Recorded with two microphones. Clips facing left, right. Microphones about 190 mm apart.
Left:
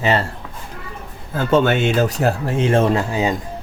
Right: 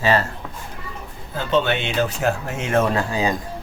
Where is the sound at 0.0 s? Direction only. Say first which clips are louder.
Left 1 dB; 25° left (ahead or behind).